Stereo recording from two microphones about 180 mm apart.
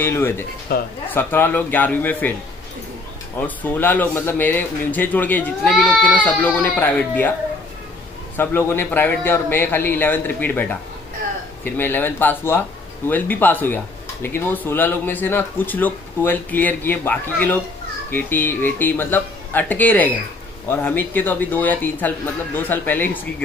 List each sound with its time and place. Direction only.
0.0 s speech: 15° left (ahead or behind)
0.7 s speech: 55° left (ahead or behind)
1.1 s speech: 10° left (ahead or behind)
3.3 s speech: 10° left (ahead or behind)
8.4 s speech: 10° left (ahead or behind)